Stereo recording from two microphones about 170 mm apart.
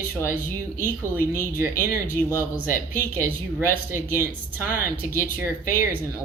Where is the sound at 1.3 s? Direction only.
15° right (ahead or behind).